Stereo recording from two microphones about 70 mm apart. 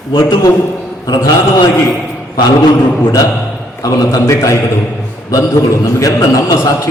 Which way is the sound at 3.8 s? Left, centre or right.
Left.